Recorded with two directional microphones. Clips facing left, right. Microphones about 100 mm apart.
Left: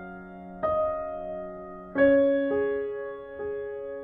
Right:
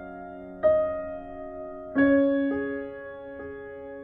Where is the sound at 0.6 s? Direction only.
45° left (ahead or behind).